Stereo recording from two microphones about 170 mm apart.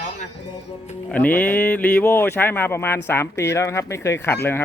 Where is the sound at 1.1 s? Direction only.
10° left (ahead or behind).